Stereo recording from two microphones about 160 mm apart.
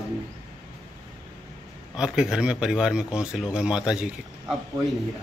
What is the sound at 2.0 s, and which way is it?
Speech, 5° right (ahead or behind).